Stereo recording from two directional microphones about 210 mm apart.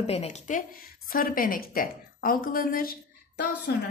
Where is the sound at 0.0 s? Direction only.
30° left (ahead or behind).